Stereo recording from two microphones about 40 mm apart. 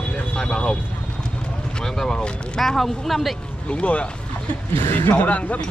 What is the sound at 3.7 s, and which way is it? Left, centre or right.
Speech, left.